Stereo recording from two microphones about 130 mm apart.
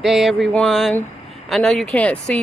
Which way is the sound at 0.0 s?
Centre (ahead or behind).